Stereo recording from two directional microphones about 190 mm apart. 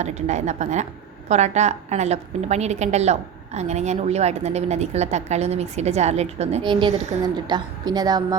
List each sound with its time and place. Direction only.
0.0 s a woman's voice: 35° right (ahead or behind); by 8.4 s 20° right (ahead or behind)